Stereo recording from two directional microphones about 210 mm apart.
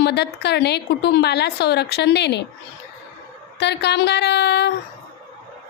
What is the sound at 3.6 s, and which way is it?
Speech, 55° left (ahead or behind).